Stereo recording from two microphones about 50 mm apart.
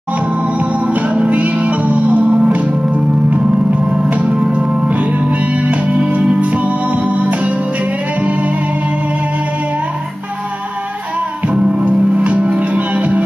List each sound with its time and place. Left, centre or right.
0.4 s music: right
3.9 s music: right
11.5 s music: right